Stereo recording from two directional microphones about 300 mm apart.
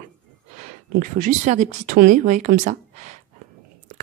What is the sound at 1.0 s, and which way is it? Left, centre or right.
Speech, right.